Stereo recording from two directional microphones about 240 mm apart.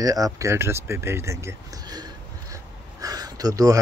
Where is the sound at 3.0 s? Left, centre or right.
Centre.